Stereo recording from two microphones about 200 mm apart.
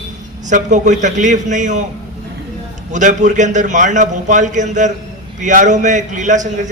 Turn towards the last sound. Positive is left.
turn(degrees=-40)  # may be behind; listen again after turning